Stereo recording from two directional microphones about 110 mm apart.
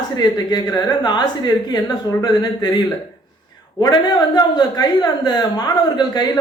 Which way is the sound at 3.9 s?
40° left (ahead or behind).